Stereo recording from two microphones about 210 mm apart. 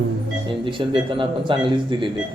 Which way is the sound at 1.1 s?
25° right (ahead or behind).